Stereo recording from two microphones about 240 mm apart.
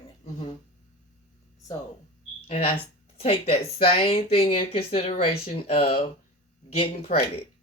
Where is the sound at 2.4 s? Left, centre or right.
Left.